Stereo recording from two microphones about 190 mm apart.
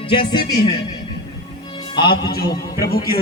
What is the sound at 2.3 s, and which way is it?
Speech, 55° left (ahead or behind).